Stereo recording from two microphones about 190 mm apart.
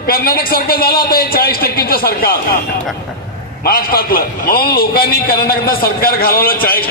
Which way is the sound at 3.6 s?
50° left (ahead or behind).